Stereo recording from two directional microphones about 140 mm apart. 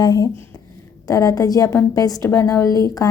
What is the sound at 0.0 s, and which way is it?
A woman's voice, 30° left (ahead or behind).